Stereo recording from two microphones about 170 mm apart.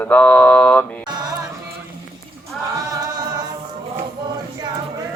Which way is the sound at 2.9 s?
20° right (ahead or behind).